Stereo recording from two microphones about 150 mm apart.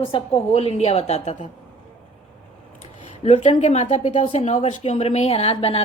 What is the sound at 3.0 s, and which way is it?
A woman's voice, 45° left (ahead or behind).